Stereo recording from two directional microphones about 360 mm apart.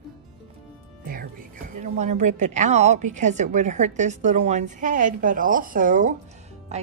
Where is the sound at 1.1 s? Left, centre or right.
Right.